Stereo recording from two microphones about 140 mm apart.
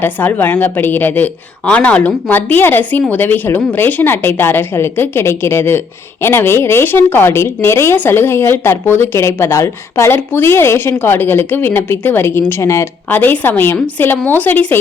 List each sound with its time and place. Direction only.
0.0 s speech: 15° left (ahead or behind)